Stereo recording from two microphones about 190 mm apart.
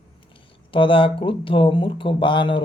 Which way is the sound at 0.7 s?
25° left (ahead or behind).